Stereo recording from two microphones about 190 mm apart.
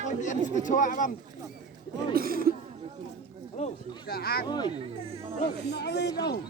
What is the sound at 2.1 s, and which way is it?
Speech, 50° right (ahead or behind).